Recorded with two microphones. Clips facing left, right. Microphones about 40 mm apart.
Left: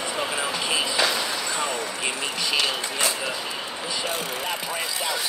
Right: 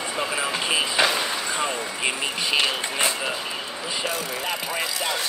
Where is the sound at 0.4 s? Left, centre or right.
Right.